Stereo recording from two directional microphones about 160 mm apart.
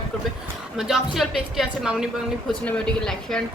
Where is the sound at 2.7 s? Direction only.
5° left (ahead or behind).